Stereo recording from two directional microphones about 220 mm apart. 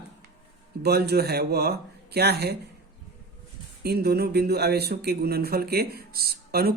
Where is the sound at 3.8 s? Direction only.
45° right (ahead or behind).